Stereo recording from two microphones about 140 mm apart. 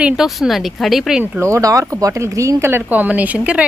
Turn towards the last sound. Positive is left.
turn(degrees=-10)  # may be behind; listen again after turning